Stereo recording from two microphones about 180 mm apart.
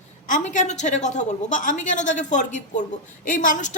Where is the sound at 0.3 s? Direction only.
45° left (ahead or behind).